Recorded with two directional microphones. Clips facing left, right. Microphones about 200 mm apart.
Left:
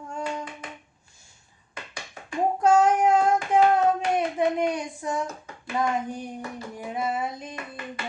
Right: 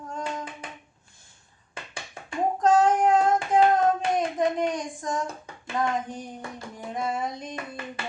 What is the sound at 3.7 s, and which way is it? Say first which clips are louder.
Hands: left 1 dB; 10° left (ahead or behind).